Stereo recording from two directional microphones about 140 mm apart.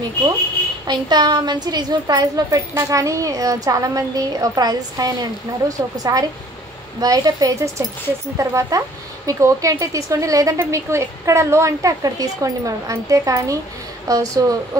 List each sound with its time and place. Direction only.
0.8 s a woman's voice: 30° right (ahead or behind)